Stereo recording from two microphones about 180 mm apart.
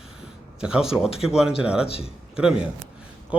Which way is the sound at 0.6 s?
5° right (ahead or behind).